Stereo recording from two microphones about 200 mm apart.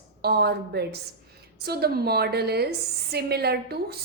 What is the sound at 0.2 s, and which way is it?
A woman's voice, 55° right (ahead or behind).